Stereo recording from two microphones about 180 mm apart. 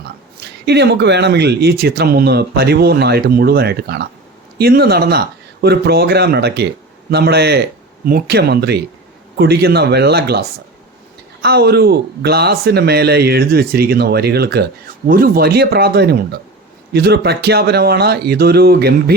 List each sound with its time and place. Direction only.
0.3 s speech: 65° right (ahead or behind)
11.4 s speech: 65° right (ahead or behind)